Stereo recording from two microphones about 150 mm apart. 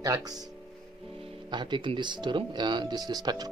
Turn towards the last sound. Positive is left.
turn(degrees=-25)  # may be behind; listen again after turning